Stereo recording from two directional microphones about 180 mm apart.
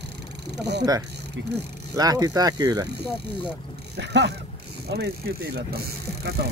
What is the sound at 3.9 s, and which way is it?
Speech, 70° right (ahead or behind).